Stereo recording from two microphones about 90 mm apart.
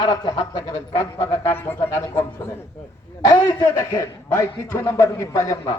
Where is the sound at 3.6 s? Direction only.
35° left (ahead or behind).